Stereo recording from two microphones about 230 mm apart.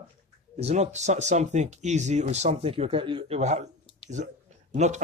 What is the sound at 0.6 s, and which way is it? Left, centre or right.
Speech, right.